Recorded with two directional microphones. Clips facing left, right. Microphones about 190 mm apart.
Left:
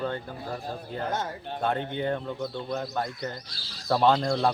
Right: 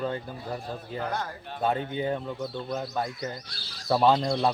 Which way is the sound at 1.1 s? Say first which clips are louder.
Left 2 dB; 20° left (ahead or behind).